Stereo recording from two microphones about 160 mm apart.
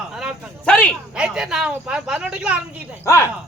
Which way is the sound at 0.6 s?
5° left (ahead or behind).